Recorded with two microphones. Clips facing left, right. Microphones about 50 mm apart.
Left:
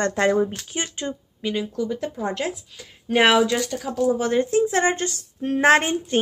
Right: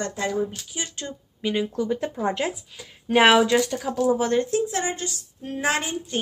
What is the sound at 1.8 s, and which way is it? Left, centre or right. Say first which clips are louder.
Speech: right 1 dB; right.